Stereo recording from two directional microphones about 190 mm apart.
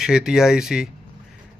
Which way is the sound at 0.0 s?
5° right (ahead or behind).